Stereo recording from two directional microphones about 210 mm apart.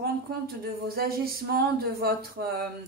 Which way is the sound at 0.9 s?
45° right (ahead or behind).